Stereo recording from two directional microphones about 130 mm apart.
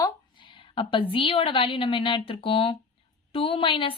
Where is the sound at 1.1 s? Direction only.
45° left (ahead or behind).